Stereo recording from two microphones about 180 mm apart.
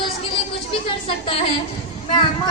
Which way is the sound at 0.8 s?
30° left (ahead or behind).